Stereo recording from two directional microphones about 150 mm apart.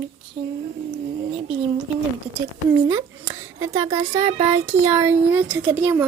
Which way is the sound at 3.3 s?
20° right (ahead or behind).